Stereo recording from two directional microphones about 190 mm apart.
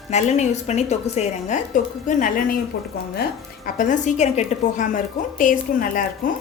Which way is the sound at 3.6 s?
45° left (ahead or behind).